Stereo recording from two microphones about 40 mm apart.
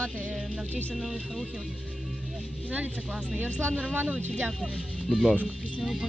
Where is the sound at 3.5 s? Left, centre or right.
Left.